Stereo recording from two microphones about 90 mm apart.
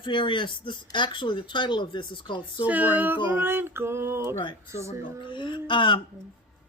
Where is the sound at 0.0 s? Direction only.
65° left (ahead or behind).